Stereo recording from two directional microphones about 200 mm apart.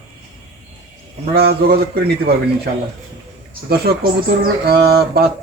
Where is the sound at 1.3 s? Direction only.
55° right (ahead or behind).